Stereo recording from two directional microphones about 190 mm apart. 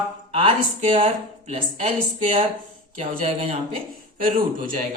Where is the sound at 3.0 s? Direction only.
30° right (ahead or behind).